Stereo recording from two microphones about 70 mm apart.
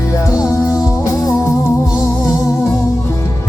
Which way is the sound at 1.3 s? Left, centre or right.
Left.